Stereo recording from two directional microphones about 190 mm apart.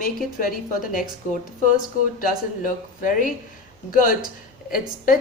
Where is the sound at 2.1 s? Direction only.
45° left (ahead or behind).